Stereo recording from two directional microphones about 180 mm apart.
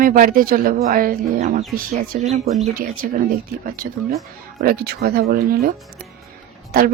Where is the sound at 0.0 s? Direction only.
50° right (ahead or behind).